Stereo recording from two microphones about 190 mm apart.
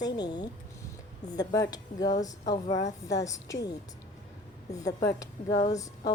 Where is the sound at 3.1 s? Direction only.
15° left (ahead or behind).